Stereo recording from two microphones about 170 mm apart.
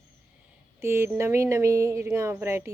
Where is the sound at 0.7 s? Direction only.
15° right (ahead or behind).